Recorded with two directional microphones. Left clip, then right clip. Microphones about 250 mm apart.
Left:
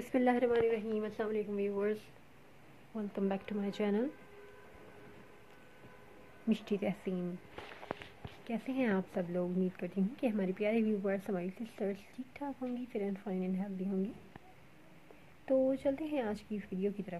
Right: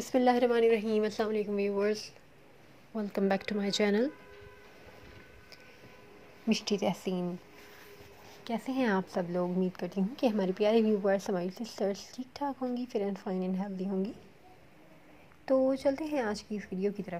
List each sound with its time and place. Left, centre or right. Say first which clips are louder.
0.1 s a woman's voice: right 5 dB; centre
0.5 s a woman's voice: right 5 dB; right
6.6 s a woman's voice: right 5 dB; right
8.5 s a woman's voice: right 4 dB; centre
15.4 s a woman's voice: right 4 dB; centre